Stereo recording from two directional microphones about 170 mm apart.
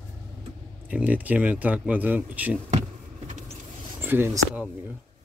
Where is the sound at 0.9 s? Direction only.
10° right (ahead or behind).